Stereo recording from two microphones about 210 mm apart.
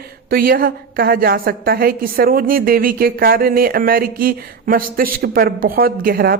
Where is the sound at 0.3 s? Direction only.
45° right (ahead or behind).